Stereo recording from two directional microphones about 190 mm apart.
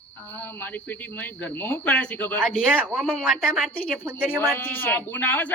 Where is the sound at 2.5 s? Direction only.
5° right (ahead or behind).